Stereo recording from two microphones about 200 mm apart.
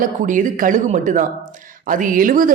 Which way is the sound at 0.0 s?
40° right (ahead or behind).